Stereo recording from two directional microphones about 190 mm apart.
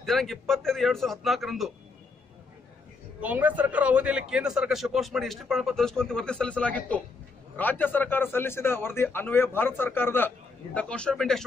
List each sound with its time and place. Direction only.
0.0 s a man's voice: centre (ahead or behind)
3.2 s a man's voice: 10° right (ahead or behind)